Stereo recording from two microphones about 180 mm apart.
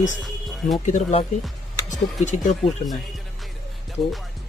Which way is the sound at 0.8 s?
40° left (ahead or behind).